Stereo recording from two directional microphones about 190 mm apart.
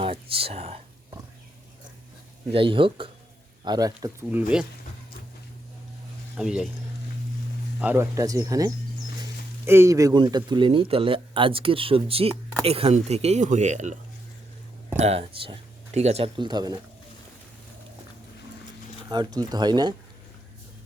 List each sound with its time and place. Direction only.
0.0 s a sound: 30° right (ahead or behind)
2.5 s speech: 25° right (ahead or behind); by 4.6 s 10° right (ahead or behind)
6.3 s speech: 5° right (ahead or behind)
7.8 s speech: 10° right (ahead or behind)
19.0 s speech: 20° right (ahead or behind)